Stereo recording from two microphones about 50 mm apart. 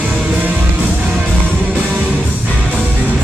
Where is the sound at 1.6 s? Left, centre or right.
Right.